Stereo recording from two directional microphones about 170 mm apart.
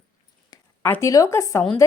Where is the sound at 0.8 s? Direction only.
15° left (ahead or behind).